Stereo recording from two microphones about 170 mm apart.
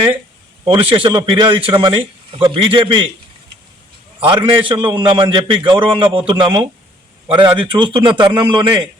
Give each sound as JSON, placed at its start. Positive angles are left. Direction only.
{"t": 0.6, "sound": "a man's voice", "side_deg": -30}
{"t": 4.2, "sound": "a man's voice", "side_deg": -30}